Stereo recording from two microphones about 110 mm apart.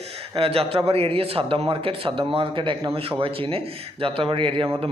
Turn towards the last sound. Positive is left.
turn(degrees=-55)  # may be behind; listen again after turning